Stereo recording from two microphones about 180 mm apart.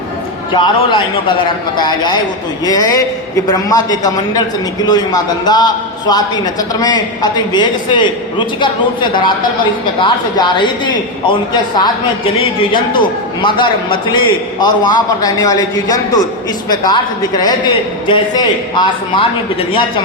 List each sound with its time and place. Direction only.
0.5 s a man's voice: 25° left (ahead or behind)
2.6 s a man's voice: 20° left (ahead or behind)
12.4 s a man's voice: 25° left (ahead or behind)